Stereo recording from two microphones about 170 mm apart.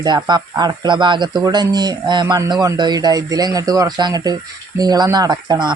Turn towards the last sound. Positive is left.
turn(degrees=-25)  # may be behind; listen again after turning